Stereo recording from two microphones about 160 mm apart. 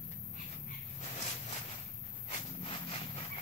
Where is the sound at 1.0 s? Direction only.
40° left (ahead or behind).